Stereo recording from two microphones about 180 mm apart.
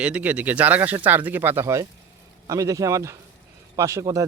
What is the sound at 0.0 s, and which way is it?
Speech, 5° right (ahead or behind).